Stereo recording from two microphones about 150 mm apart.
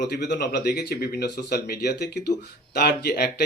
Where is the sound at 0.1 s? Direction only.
90° left.